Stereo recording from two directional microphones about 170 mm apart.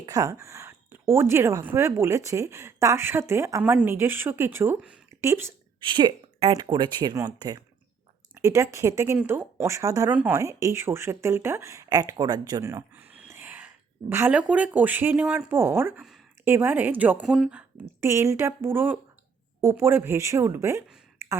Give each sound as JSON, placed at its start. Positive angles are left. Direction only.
{"t": 0.0, "sound": "a woman's voice", "side_deg": -20}
{"t": 5.8, "sound": "a woman's voice", "side_deg": -25}
{"t": 21.2, "sound": "a sound", "side_deg": -15}